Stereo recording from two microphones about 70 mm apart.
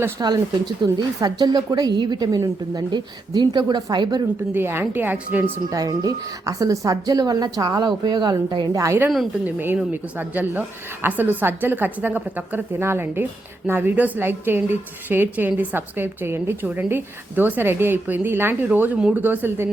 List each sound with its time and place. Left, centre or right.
0.2 s a woman's voice: right
0.8 s a woman's voice: right
4.5 s a woman's voice: right
5.7 s a woman's voice: right
7.8 s speech: right
8.7 s a woman's voice: right
9.9 s a woman's voice: right
12.8 s a woman's voice: right